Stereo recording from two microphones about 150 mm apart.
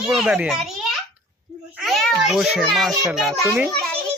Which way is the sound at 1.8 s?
Centre (ahead or behind).